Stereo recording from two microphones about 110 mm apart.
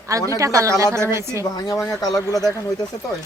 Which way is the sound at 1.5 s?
35° left (ahead or behind).